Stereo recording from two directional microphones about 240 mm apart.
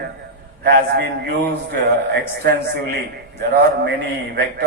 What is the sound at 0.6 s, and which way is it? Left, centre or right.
Speech, right.